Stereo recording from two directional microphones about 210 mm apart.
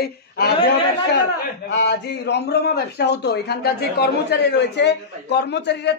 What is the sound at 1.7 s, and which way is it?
A man's voice, 50° left (ahead or behind).